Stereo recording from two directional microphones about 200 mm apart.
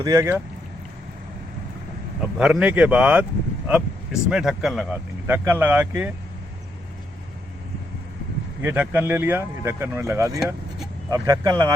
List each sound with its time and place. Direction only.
0.0 s speech: 15° right (ahead or behind)
2.4 s speech: 5° right (ahead or behind)
8.6 s speech: 10° right (ahead or behind)